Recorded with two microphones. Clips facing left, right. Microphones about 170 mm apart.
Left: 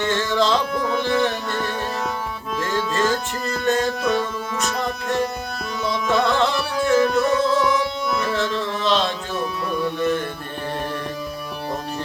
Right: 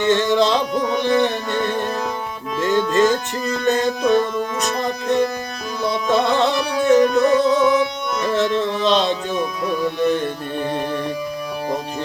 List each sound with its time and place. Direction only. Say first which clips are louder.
0.0 s music: right 4 dB; 20° right (ahead or behind)
6.1 s music: right 2 dB; 20° right (ahead or behind)